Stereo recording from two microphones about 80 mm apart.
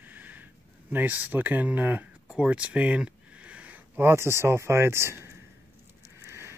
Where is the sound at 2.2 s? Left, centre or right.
Centre.